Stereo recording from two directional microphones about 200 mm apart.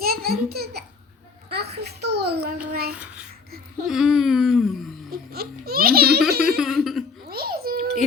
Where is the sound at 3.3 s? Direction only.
50° right (ahead or behind).